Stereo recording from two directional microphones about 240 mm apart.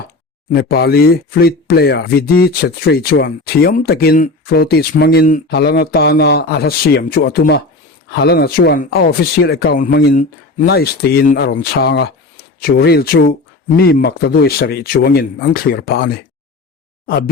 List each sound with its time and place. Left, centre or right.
0.5 s speech: left
17.1 s speech: left